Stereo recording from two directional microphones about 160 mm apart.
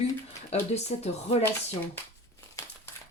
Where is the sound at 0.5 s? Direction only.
40° left (ahead or behind).